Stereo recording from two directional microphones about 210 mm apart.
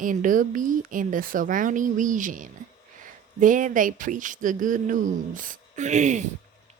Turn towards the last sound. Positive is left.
turn(degrees=-35)  # may be behind; listen again after turning